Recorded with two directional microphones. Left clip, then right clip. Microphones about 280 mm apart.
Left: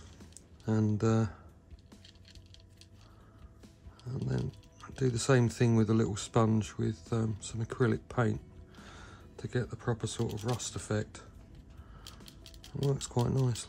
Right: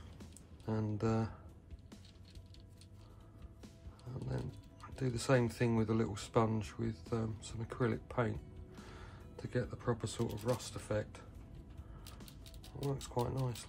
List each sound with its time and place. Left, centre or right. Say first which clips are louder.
0.7 s speech: left 6 dB; left
4.1 s speech: left 6 dB; left
9.4 s speech: left 3 dB; left
12.0 s music: left 6 dB; centre
13.0 s speech: left 5 dB; left